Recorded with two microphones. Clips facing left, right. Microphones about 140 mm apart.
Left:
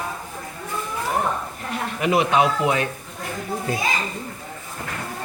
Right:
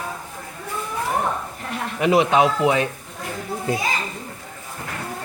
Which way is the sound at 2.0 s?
25° right (ahead or behind).